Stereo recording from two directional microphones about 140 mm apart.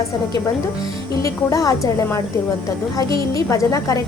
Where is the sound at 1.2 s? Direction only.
25° left (ahead or behind).